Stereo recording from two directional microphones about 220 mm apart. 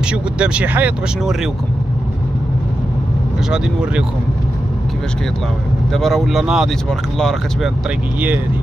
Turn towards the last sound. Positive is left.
turn(degrees=0)  # may be behind; listen again after turning